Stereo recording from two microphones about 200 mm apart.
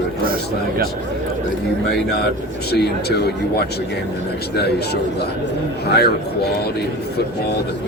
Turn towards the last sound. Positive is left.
turn(degrees=55)  # may be behind; listen again after turning